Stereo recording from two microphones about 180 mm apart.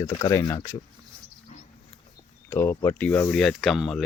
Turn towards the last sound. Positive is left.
turn(degrees=0)  # may be behind; listen again after turning